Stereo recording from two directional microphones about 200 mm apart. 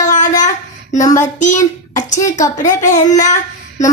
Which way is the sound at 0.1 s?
40° left (ahead or behind).